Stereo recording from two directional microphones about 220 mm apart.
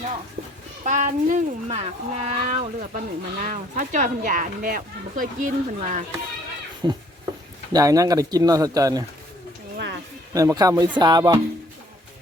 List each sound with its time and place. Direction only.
0.9 s speech: 35° right (ahead or behind)
6.8 s speech: 15° right (ahead or behind)
9.7 s a sound: 50° right (ahead or behind)
10.3 s speech: 15° right (ahead or behind)
10.9 s music: 20° right (ahead or behind)